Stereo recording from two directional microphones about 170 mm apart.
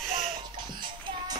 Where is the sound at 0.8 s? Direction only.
25° right (ahead or behind).